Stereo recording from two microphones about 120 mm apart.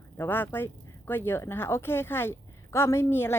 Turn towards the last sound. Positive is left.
turn(degrees=20)  # may be behind; listen again after turning